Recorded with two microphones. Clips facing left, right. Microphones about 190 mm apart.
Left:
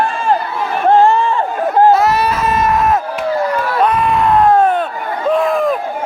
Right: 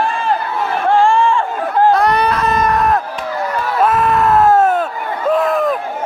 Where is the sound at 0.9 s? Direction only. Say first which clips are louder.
Even; 20° left (ahead or behind).